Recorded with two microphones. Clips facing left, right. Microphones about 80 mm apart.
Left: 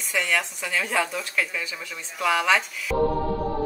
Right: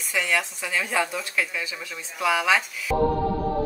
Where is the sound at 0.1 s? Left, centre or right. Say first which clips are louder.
Even; centre.